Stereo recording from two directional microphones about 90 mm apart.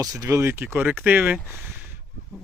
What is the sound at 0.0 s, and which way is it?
Speech, 40° right (ahead or behind).